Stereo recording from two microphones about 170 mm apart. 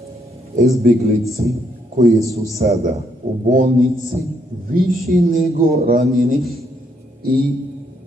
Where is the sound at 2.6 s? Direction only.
50° right (ahead or behind).